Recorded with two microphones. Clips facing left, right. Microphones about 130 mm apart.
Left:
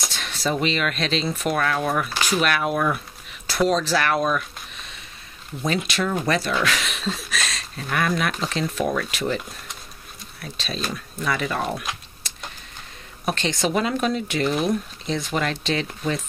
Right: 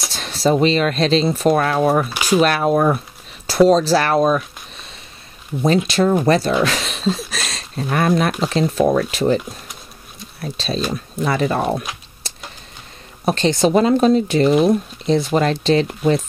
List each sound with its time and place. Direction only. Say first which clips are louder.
0.1 s speech: right 10 dB; 35° right (ahead or behind)
5.9 s speech: right 8 dB; 35° right (ahead or behind)
6.6 s a sound: right 6 dB; 35° right (ahead or behind)
7.9 s speech: right 6 dB; 35° right (ahead or behind)
10.4 s speech: right 7 dB; 35° right (ahead or behind)
12.2 s a sound: right 5 dB; 35° right (ahead or behind)
13.2 s speech: right 8 dB; 35° right (ahead or behind)